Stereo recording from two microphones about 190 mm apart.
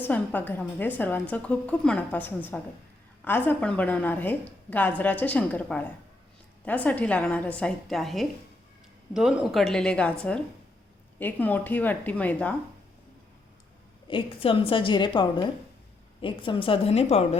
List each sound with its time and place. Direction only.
0.0 s a woman's voice: 10° left (ahead or behind)
14.1 s a woman's voice: 30° left (ahead or behind)